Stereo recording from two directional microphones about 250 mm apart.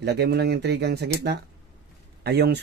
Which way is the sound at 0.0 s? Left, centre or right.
Right.